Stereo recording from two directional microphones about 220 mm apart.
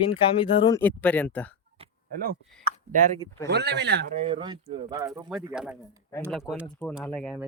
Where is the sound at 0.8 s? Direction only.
5° left (ahead or behind).